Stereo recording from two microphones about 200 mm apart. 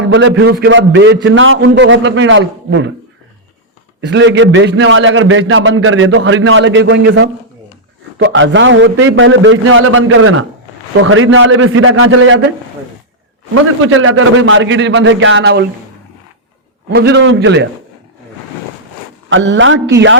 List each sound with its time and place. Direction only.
0.0 s a man's voice: 65° right (ahead or behind)
4.0 s a man's voice: 60° right (ahead or behind)
8.3 s a man's voice: 70° right (ahead or behind)
13.5 s a man's voice: 90° right; by 15.6 s 65° right (ahead or behind)
16.9 s a man's voice: 55° right (ahead or behind)
19.3 s a man's voice: 65° right (ahead or behind)